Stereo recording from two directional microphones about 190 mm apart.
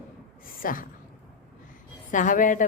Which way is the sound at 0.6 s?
45° left (ahead or behind).